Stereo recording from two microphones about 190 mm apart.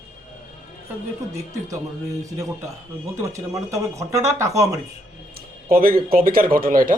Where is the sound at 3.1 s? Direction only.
15° right (ahead or behind).